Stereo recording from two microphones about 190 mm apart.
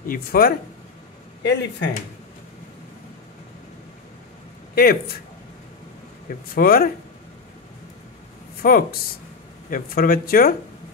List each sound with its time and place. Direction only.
0.1 s speech: 50° left (ahead or behind)
1.4 s speech: 65° left (ahead or behind)
4.7 s speech: 55° left (ahead or behind)
6.2 s speech: 50° left (ahead or behind)
8.6 s speech: 50° left (ahead or behind)